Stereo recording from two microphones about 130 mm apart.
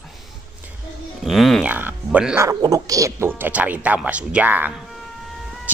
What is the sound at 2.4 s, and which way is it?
Speech, 25° right (ahead or behind).